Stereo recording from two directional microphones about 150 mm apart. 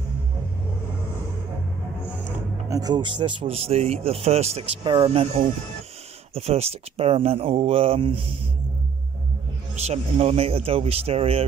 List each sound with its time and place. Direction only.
2.7 s speech: 25° right (ahead or behind)
9.8 s speech: 45° right (ahead or behind)